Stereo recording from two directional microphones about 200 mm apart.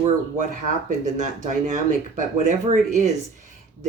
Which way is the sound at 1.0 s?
35° right (ahead or behind).